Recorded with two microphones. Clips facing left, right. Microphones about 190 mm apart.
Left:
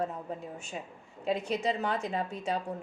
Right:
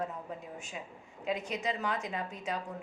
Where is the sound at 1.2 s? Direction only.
30° left (ahead or behind).